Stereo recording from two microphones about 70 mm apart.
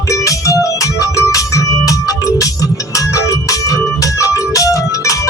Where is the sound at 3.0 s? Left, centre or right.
Left.